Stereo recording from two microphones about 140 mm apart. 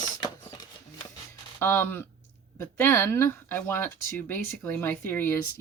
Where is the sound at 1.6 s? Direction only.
15° left (ahead or behind).